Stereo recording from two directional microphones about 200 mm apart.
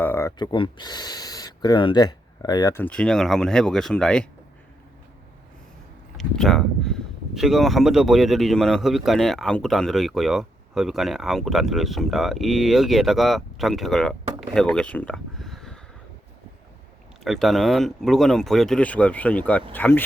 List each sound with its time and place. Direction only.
0.0 s speech: 10° left (ahead or behind)
6.1 s speech: centre (ahead or behind)
17.2 s speech: centre (ahead or behind)